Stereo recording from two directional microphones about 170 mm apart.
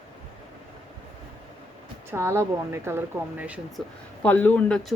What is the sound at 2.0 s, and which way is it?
Speech, 15° right (ahead or behind).